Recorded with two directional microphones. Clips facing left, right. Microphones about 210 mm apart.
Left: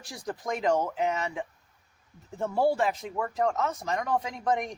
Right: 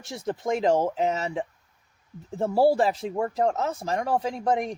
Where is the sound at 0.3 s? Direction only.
25° right (ahead or behind).